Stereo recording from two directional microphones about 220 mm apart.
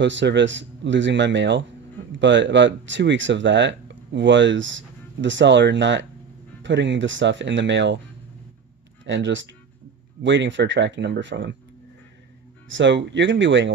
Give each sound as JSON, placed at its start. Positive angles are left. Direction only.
{"t": 0.0, "sound": "speech", "side_deg": -55}
{"t": 9.0, "sound": "speech", "side_deg": -55}
{"t": 12.6, "sound": "speech", "side_deg": -55}